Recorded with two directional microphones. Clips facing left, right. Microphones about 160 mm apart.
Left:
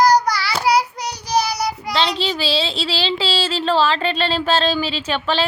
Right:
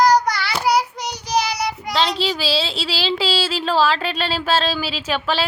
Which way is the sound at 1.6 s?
Centre (ahead or behind).